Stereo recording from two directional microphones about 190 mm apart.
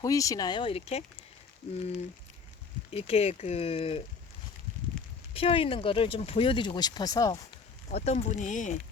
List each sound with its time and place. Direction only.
0.0 s speech: 15° left (ahead or behind)
2.9 s speech: 30° left (ahead or behind)
4.9 s a sound: 5° left (ahead or behind)
5.3 s speech: 30° left (ahead or behind)
7.9 s speech: 35° left (ahead or behind)